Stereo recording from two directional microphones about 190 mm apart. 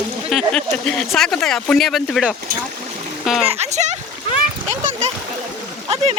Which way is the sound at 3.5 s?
35° right (ahead or behind).